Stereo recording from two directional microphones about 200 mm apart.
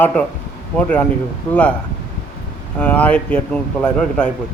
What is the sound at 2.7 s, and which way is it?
Speech, 5° left (ahead or behind).